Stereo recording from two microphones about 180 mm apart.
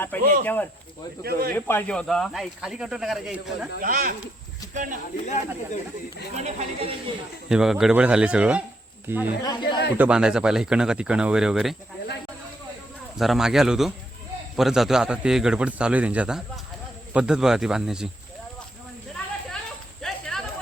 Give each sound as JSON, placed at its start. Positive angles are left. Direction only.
{"t": 0.4, "sound": "speech", "side_deg": 10}
{"t": 1.2, "sound": "speech", "side_deg": -55}
{"t": 1.5, "sound": "speech", "side_deg": 10}
{"t": 3.8, "sound": "speech", "side_deg": -50}
{"t": 5.2, "sound": "speech", "side_deg": 40}
{"t": 6.3, "sound": "speech", "side_deg": -40}
{"t": 7.5, "sound": "speech", "side_deg": -5}
{"t": 9.4, "sound": "speech", "side_deg": 25}
{"t": 10.0, "sound": "speech", "side_deg": -5}
{"t": 13.1, "sound": "speech", "side_deg": 0}
{"t": 20.0, "sound": "a sound", "side_deg": 5}